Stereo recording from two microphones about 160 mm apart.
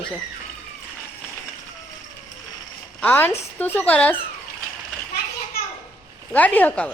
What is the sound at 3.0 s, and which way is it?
A woman's voice, 10° left (ahead or behind).